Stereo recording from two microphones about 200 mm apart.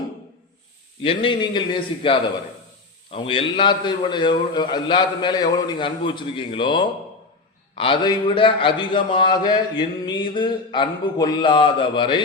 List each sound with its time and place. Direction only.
1.0 s speech: 25° left (ahead or behind)